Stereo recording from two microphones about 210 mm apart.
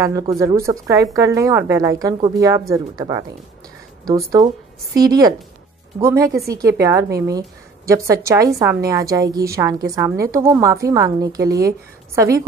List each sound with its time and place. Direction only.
0.4 s a woman's voice: 15° right (ahead or behind)